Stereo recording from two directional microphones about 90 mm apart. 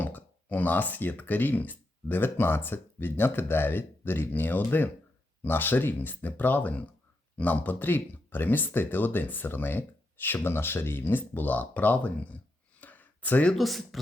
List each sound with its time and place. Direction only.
0.0 s speech: 20° left (ahead or behind)
12.8 s a sound: 20° left (ahead or behind)
13.5 s speech: centre (ahead or behind)